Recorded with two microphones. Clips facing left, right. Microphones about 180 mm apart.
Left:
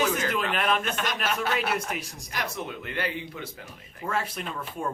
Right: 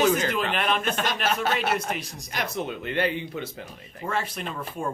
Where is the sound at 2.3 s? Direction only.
20° right (ahead or behind).